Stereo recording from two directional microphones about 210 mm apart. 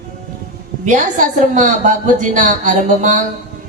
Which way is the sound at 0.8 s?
35° right (ahead or behind).